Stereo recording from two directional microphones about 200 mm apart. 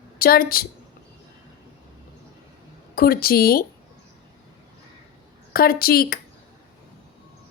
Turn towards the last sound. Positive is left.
turn(degrees=50)  # may be behind; listen again after turning